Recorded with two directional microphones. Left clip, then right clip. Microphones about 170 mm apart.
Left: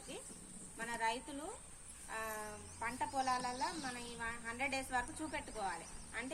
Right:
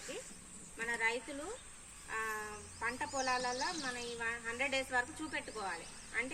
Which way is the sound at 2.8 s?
35° left (ahead or behind).